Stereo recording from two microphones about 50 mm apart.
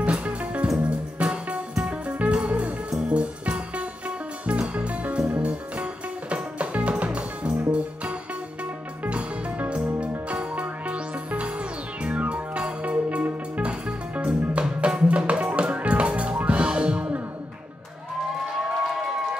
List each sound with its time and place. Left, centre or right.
0.0 s music: right